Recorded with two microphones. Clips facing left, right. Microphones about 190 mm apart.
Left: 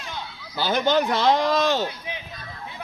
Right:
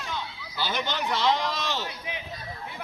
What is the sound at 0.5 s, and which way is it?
Speech, 45° left (ahead or behind).